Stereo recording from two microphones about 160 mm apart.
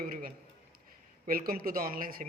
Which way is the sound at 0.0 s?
65° right (ahead or behind).